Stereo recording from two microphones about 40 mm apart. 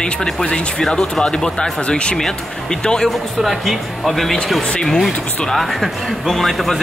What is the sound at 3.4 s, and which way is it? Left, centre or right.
Speech, centre.